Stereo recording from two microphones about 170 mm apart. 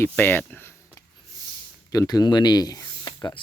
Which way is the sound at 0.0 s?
10° left (ahead or behind).